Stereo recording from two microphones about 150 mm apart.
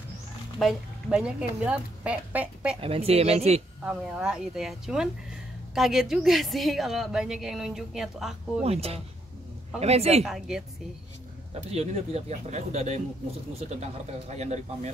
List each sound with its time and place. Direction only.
0.6 s speech: centre (ahead or behind)
2.8 s speech: 40° right (ahead or behind)
3.8 s a woman's voice: 5° right (ahead or behind)
8.6 s speech: 40° right (ahead or behind)
10.2 s a woman's voice: 5° right (ahead or behind)
11.7 s speech: 45° right (ahead or behind)